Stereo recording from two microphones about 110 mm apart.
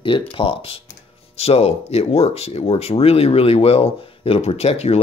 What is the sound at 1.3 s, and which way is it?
Speech, 65° left (ahead or behind).